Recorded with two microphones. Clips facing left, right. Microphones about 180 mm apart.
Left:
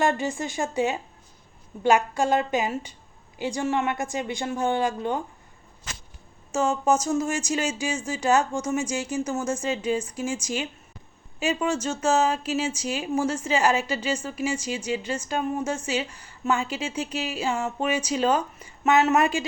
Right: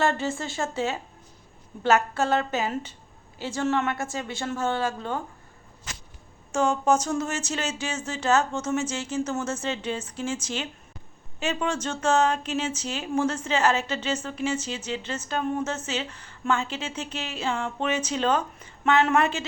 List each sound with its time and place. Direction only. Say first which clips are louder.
0.0 s speech: left 1 dB; 15° left (ahead or behind)
6.5 s speech: even; 5° left (ahead or behind)